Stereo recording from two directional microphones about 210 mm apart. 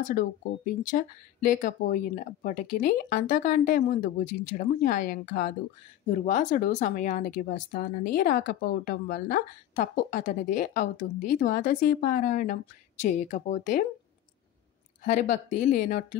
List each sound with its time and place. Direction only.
0.0 s speech: 40° left (ahead or behind)
15.0 s speech: 35° left (ahead or behind)